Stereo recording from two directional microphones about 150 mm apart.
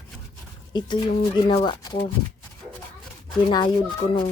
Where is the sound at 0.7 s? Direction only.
30° left (ahead or behind).